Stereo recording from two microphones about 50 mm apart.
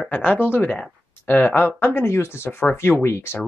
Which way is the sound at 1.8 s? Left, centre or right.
Left.